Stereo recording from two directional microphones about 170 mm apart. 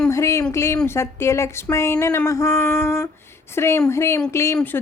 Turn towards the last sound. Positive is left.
turn(degrees=10)  # may be behind; listen again after turning